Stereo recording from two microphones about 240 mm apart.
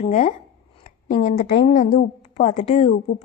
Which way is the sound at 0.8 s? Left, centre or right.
Left.